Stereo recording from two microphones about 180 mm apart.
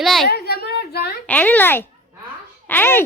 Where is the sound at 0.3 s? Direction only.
60° left (ahead or behind).